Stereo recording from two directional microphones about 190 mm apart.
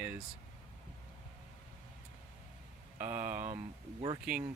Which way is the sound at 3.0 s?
40° right (ahead or behind).